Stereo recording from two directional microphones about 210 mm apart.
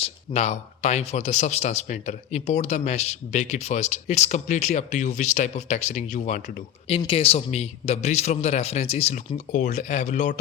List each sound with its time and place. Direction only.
0.0 s a man's voice: 30° left (ahead or behind)